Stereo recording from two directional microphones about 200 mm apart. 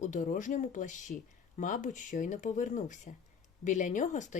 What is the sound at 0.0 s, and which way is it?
Speech, 40° left (ahead or behind).